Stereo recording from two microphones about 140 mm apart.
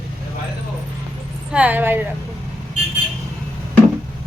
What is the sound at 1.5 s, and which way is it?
Speech, 10° right (ahead or behind).